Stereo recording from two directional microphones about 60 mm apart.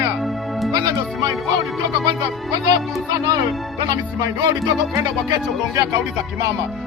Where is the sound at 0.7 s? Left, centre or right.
Right.